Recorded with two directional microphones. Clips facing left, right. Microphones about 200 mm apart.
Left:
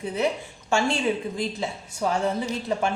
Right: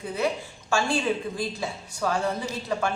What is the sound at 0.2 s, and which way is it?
Speech, 20° left (ahead or behind).